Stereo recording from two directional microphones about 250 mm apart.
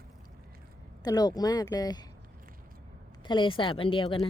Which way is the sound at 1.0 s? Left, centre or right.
Centre.